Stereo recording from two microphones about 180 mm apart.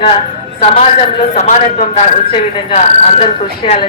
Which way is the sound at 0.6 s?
35° left (ahead or behind).